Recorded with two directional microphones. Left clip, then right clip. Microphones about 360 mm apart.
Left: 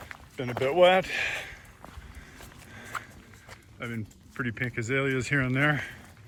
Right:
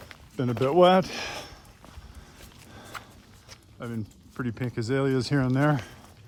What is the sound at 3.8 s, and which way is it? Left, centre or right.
Speech, centre.